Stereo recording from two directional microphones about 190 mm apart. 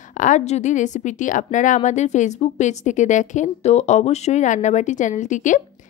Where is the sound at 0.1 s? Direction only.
40° left (ahead or behind).